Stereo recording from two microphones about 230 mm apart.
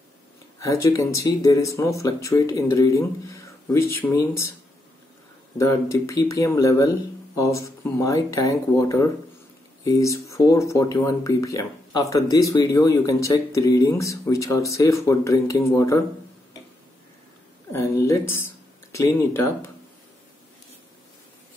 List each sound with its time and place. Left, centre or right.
0.8 s speech: centre
5.6 s speech: centre
17.6 s speech: centre